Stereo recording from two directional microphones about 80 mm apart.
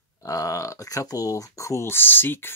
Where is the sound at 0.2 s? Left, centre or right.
Left.